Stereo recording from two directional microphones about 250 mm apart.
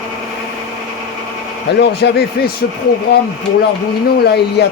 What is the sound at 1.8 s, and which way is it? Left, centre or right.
Speech, left.